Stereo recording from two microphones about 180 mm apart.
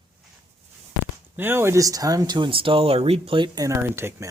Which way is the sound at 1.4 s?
10° right (ahead or behind).